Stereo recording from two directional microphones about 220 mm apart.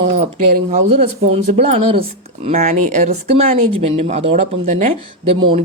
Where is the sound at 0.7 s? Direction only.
30° right (ahead or behind).